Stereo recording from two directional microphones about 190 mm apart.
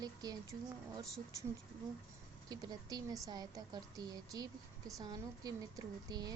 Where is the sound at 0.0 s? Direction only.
20° right (ahead or behind).